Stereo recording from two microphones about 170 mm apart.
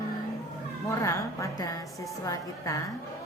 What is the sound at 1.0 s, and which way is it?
A woman's voice, 20° left (ahead or behind).